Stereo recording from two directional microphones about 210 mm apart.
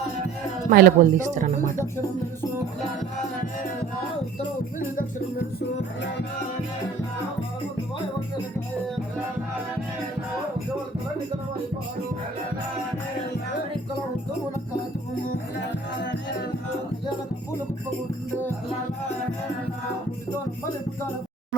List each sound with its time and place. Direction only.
0.7 s speech: 45° right (ahead or behind)
1.7 s music: 10° left (ahead or behind)
4.4 s music: 40° left (ahead or behind)
6.0 s music: 55° left (ahead or behind)